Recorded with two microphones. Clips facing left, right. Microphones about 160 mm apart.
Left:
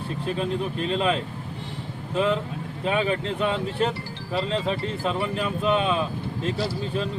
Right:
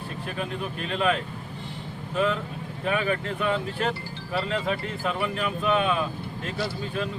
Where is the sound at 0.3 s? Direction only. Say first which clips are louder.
Left 5 dB; 30° left (ahead or behind).